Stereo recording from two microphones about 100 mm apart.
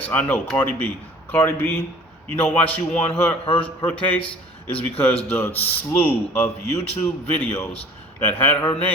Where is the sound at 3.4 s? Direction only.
70° left (ahead or behind).